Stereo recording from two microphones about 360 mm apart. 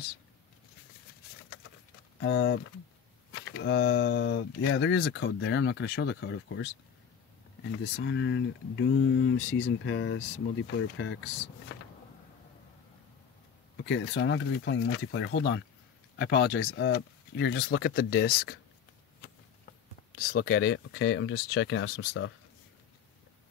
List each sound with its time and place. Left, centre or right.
2.1 s speech: left
7.8 s speech: left
13.7 s speech: left
20.2 s speech: left